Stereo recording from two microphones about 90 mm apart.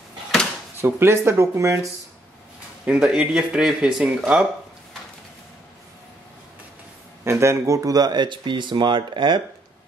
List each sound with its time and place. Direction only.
0.7 s speech: 25° right (ahead or behind)
2.8 s speech: 10° right (ahead or behind)
7.2 s speech: 30° right (ahead or behind); by 9.4 s 60° right (ahead or behind)